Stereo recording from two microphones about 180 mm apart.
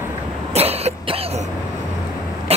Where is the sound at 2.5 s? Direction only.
35° right (ahead or behind).